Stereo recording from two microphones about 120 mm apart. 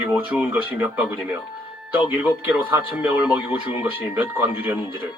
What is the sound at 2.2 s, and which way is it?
Speech, 10° right (ahead or behind).